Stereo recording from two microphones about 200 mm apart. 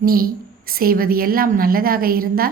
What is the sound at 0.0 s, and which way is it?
A woman's voice, 45° right (ahead or behind).